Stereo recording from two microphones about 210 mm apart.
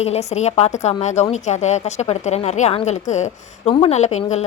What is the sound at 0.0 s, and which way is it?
A woman's voice, 30° left (ahead or behind).